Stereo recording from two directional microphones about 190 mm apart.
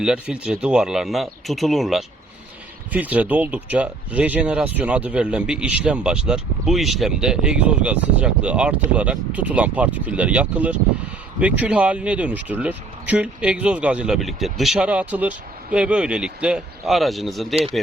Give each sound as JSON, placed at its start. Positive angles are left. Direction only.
{"t": 0.0, "sound": "speech", "side_deg": -5}
{"t": 17.5, "sound": "speech", "side_deg": -30}